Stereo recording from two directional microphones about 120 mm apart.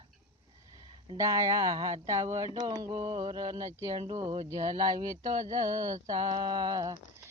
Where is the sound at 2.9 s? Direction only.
50° right (ahead or behind); by 5.0 s 35° right (ahead or behind).